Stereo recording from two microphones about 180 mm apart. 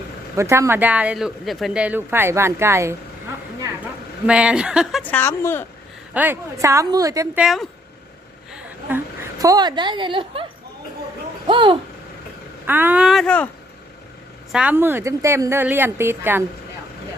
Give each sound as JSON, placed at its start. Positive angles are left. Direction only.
{"t": 0.3, "sound": "speech", "side_deg": -15}
{"t": 4.3, "sound": "a woman's voice", "side_deg": -5}
{"t": 5.1, "sound": "speech", "side_deg": 15}
{"t": 6.1, "sound": "speech", "side_deg": -10}
{"t": 7.3, "sound": "a woman's voice", "side_deg": 0}
{"t": 8.5, "sound": "a sound", "side_deg": -10}
{"t": 11.4, "sound": "speech", "side_deg": -25}
{"t": 12.6, "sound": "a woman's voice", "side_deg": -10}
{"t": 14.5, "sound": "speech", "side_deg": -10}